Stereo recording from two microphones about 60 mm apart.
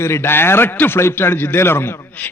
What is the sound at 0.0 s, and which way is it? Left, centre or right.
A man's voice, left.